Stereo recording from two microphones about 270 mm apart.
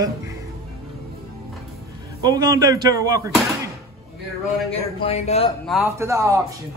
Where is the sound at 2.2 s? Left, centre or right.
Centre.